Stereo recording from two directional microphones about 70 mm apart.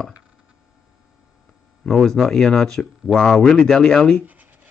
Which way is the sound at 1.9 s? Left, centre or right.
Centre.